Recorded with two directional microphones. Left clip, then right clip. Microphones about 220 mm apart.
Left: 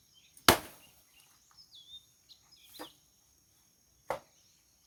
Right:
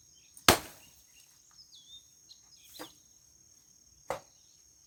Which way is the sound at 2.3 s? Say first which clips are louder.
Right 1 dB; 20° left (ahead or behind).